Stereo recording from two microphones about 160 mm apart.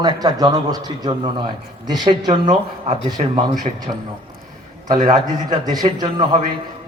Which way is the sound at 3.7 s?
40° right (ahead or behind).